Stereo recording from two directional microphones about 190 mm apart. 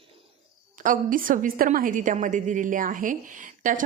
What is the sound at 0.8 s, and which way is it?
A woman's voice, 45° right (ahead or behind).